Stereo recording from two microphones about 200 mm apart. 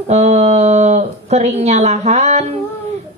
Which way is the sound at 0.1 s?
35° right (ahead or behind).